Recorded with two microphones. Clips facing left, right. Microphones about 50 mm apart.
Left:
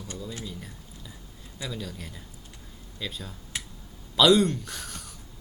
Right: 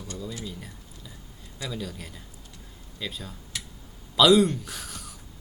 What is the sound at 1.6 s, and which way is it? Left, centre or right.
A man's voice, centre.